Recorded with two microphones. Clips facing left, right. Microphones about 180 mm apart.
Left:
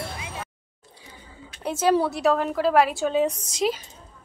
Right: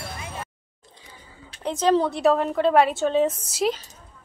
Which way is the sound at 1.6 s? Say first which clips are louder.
Right 1 dB; 10° left (ahead or behind).